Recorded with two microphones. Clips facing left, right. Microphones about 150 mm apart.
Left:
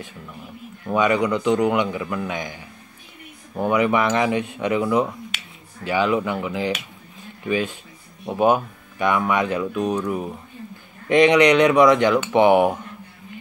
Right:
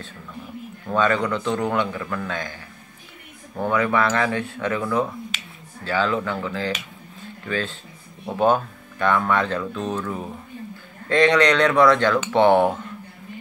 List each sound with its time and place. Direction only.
0.8 s speech: 15° left (ahead or behind)